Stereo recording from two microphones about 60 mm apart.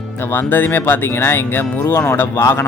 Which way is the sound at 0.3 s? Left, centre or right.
Left.